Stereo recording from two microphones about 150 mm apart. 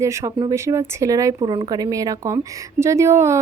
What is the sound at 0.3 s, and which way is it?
Speech, 30° right (ahead or behind).